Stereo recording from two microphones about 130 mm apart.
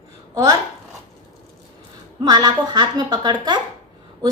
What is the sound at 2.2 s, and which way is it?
A woman's voice, 30° right (ahead or behind).